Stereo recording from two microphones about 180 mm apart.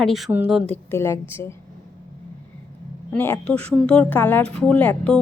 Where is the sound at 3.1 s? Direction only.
10° left (ahead or behind).